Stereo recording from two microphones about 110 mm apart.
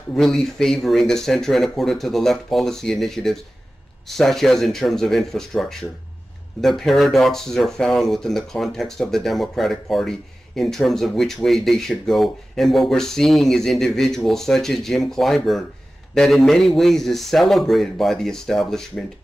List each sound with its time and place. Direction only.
0.1 s speech: centre (ahead or behind)